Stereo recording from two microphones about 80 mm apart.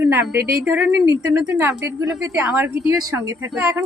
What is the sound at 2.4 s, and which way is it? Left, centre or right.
Speech, centre.